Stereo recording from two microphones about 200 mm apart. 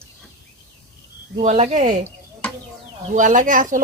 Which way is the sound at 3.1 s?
40° right (ahead or behind).